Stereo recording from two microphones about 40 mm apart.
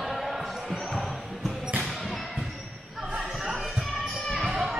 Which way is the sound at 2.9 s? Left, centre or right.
Centre.